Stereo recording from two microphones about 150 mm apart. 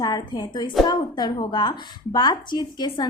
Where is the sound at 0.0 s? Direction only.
30° left (ahead or behind).